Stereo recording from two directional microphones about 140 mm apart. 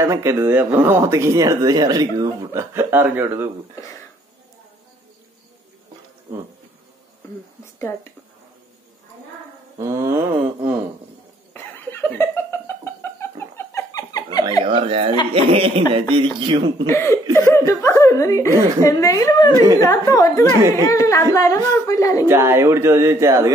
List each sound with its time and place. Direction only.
0.0 s speech: 20° right (ahead or behind)
9.8 s speech: 20° right (ahead or behind)
11.5 s a sound: 15° left (ahead or behind)
14.6 s speech: 40° right (ahead or behind)
16.8 s speech: 20° left (ahead or behind)
22.2 s speech: 15° right (ahead or behind)